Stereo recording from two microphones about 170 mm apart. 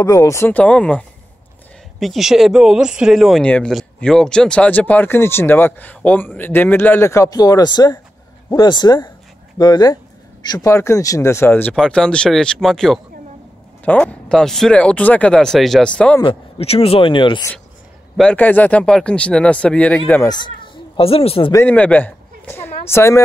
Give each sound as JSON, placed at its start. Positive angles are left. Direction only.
{"t": 0.0, "sound": "speech", "side_deg": 20}
{"t": 16.2, "sound": "speech", "side_deg": 30}
{"t": 18.1, "sound": "speech", "side_deg": 5}
{"t": 20.2, "sound": "speech", "side_deg": 25}
{"t": 21.6, "sound": "a sound", "side_deg": 10}
{"t": 22.8, "sound": "speech", "side_deg": 15}